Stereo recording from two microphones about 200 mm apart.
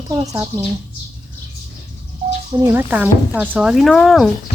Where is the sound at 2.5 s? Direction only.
15° right (ahead or behind).